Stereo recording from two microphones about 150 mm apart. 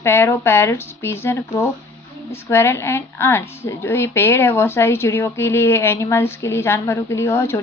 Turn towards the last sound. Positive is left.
turn(degrees=15)  # may be behind; listen again after turning